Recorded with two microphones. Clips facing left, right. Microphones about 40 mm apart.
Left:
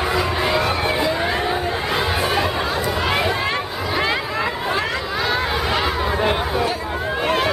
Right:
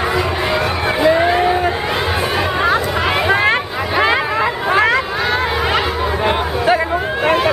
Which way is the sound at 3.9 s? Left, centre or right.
Right.